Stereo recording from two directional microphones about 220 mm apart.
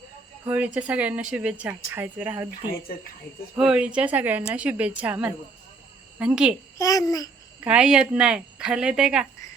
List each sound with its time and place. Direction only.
0.4 s speech: 5° right (ahead or behind)
3.5 s speech: 5° right (ahead or behind)
6.7 s a child's voice: 15° left (ahead or behind)
7.6 s speech: 5° right (ahead or behind)